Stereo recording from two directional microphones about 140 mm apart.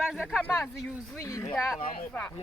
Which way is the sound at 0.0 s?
5° right (ahead or behind).